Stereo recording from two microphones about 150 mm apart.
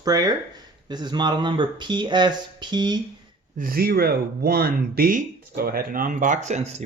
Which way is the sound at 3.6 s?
80° right.